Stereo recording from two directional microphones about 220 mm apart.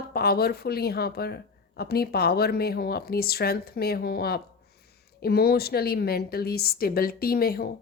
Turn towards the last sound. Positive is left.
turn(degrees=45)  # may be behind; listen again after turning